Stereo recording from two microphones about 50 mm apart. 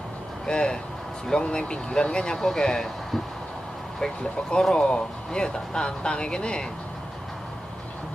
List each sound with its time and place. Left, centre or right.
0.5 s speech: centre
4.2 s speech: centre